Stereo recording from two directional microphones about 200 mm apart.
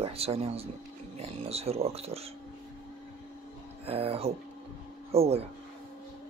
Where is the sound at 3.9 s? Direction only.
30° right (ahead or behind).